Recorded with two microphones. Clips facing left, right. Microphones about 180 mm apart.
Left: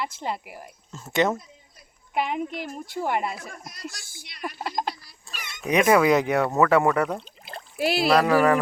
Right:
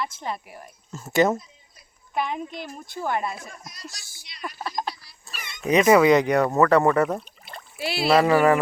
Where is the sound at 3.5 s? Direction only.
55° left (ahead or behind).